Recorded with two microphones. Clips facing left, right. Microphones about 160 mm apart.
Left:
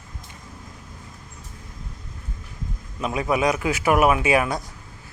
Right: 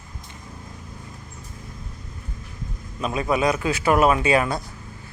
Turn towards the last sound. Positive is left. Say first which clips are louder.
# even
turn(degrees=10)  # may be behind; listen again after turning